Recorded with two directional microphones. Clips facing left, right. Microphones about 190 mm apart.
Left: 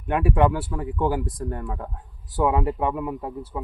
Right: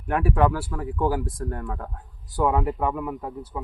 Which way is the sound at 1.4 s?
10° left (ahead or behind).